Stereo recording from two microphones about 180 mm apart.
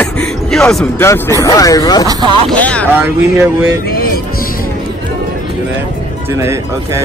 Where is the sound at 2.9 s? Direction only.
15° right (ahead or behind).